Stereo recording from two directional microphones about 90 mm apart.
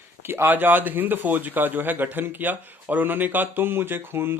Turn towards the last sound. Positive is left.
turn(degrees=-25)  # may be behind; listen again after turning